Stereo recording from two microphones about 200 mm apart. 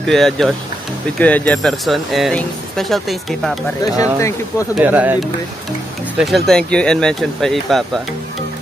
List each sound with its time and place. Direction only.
0.0 s speech: centre (ahead or behind)
3.8 s speech: 15° left (ahead or behind)
4.7 s speech: 10° right (ahead or behind)